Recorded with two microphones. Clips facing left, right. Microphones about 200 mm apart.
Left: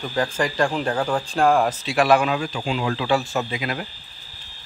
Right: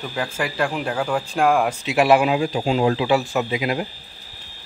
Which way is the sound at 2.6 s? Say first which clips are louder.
Right 7 dB; 40° right (ahead or behind).